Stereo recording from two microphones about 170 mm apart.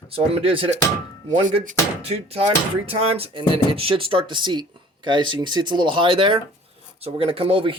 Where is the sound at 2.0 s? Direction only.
35° right (ahead or behind).